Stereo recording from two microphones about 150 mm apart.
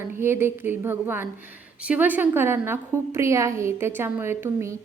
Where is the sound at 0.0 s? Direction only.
15° right (ahead or behind).